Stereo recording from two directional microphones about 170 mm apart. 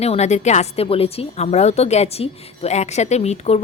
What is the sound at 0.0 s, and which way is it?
Speech, 40° left (ahead or behind).